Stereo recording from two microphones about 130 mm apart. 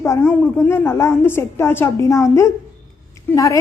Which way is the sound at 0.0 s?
20° left (ahead or behind).